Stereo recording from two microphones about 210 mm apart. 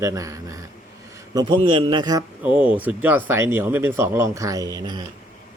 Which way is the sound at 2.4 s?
5° right (ahead or behind).